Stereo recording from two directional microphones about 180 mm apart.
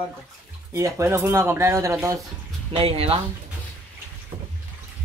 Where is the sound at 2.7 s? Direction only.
35° right (ahead or behind).